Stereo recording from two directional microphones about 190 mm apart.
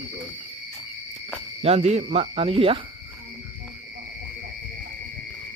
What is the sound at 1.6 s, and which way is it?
Speech, 35° right (ahead or behind).